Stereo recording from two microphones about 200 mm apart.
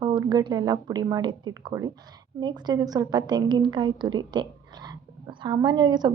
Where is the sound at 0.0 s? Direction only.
20° right (ahead or behind).